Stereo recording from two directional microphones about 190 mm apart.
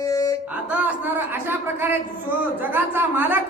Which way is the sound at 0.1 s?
20° left (ahead or behind).